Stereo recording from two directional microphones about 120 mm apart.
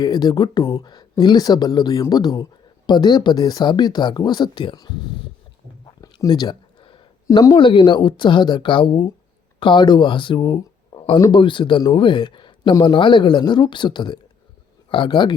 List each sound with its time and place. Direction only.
0.0 s speech: 35° left (ahead or behind)
6.0 s a sound: 35° left (ahead or behind)
7.3 s speech: 30° left (ahead or behind)
7.5 s speech: 45° left (ahead or behind)